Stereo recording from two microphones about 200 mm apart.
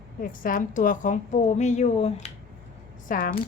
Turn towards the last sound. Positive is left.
turn(degrees=45)  # may be behind; listen again after turning